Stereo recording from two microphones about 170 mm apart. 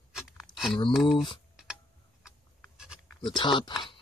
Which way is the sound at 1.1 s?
30° left (ahead or behind).